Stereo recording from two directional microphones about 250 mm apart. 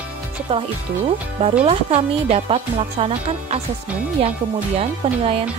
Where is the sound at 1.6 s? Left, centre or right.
Right.